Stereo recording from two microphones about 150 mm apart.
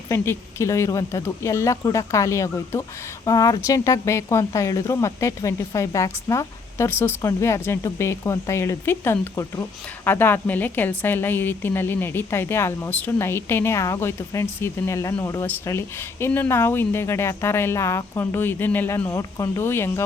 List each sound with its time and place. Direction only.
0.1 s speech: 20° left (ahead or behind)